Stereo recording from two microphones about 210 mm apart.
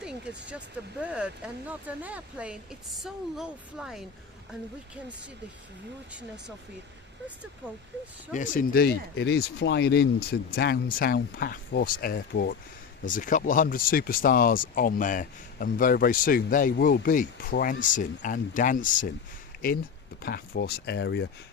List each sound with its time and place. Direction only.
0.0 s vehicle: 5° right (ahead or behind)
1.0 s speech: 5° right (ahead or behind)
8.3 s speech: 40° left (ahead or behind)
20.2 s speech: 50° left (ahead or behind)